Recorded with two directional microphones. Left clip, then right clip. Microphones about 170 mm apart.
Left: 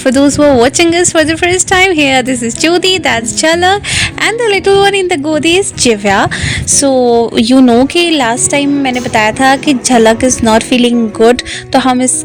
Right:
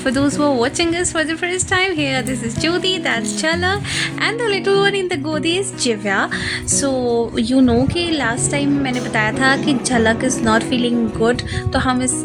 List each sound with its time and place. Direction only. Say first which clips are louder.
0.0 s speech: left 9 dB; 40° left (ahead or behind)